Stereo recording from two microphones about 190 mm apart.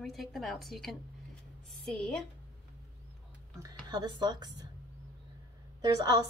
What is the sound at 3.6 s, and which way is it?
A woman's voice, 20° right (ahead or behind).